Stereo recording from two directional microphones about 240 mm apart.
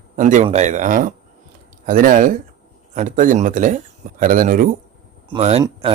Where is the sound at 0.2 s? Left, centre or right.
Right.